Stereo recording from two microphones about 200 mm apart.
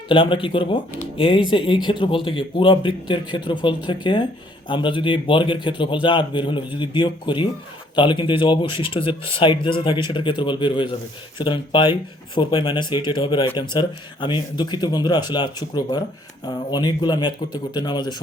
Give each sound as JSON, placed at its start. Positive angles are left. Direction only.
{"t": 0.1, "sound": "speech", "side_deg": 25}